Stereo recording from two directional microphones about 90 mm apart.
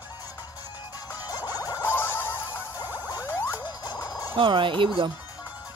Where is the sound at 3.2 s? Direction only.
30° left (ahead or behind).